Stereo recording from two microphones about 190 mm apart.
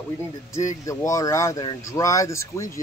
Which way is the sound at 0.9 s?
15° left (ahead or behind).